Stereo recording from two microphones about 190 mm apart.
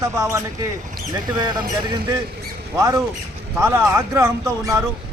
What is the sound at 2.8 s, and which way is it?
Speech, 15° right (ahead or behind).